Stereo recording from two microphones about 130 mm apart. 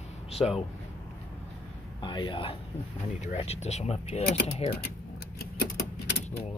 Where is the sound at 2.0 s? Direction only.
40° left (ahead or behind).